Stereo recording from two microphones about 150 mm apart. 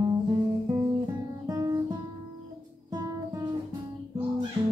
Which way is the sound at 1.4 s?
25° right (ahead or behind).